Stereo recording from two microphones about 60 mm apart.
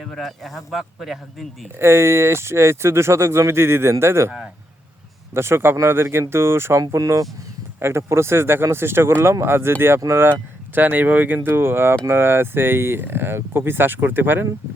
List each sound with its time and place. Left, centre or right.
0.2 s speech: centre
1.8 s speech: right
5.3 s speech: right
6.9 s speech: right
7.8 s speech: right